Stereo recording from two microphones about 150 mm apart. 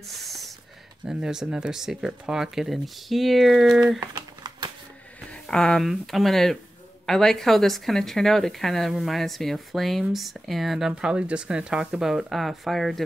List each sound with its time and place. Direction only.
0.1 s a sound: centre (ahead or behind)
1.0 s a woman's voice: 5° right (ahead or behind)
4.0 s typing: 25° right (ahead or behind)
5.3 s a woman's voice: 5° left (ahead or behind)